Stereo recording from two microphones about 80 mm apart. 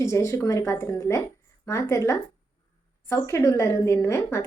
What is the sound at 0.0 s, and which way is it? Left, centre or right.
A woman's voice, left.